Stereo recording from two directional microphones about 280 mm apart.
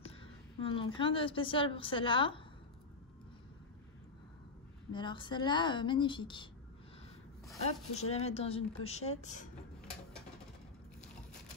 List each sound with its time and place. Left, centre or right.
0.0 s a woman's voice: centre
4.9 s speech: centre
7.6 s speech: left